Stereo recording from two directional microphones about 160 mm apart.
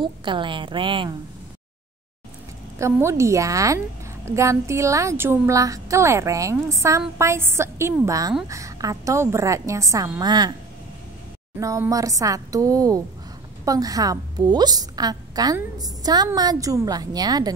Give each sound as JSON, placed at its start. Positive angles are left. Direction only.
{"t": 0.0, "sound": "a woman's voice", "side_deg": -30}
{"t": 2.8, "sound": "a woman's voice", "side_deg": -15}
{"t": 11.6, "sound": "a woman's voice", "side_deg": -20}